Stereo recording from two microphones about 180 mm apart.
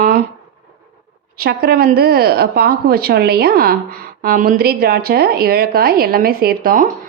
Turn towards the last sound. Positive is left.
turn(degrees=-50)  # may be behind; listen again after turning